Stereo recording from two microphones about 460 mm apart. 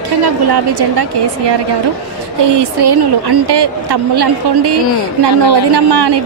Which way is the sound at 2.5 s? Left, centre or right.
Right.